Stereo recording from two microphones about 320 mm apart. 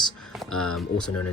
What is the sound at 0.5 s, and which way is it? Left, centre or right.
Speech, left.